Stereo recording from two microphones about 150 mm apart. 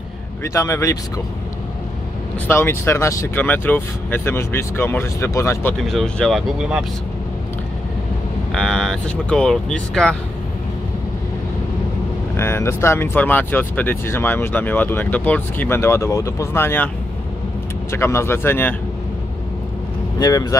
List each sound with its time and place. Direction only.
0.4 s speech: 20° left (ahead or behind)
2.4 s speech: 15° left (ahead or behind)
5.9 s speech: centre (ahead or behind)
8.5 s speech: 5° left (ahead or behind)
12.4 s speech: 15° left (ahead or behind)
17.9 s speech: 15° left (ahead or behind)
20.2 s speech: 25° left (ahead or behind)